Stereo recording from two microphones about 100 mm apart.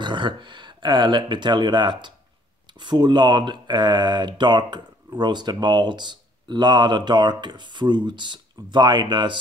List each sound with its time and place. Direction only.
0.0 s speech: 50° right (ahead or behind)